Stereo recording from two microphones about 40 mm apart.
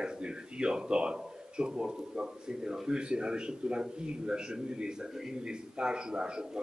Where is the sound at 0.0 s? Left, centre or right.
Right.